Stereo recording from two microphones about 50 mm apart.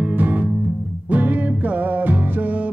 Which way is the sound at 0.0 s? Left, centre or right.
Right.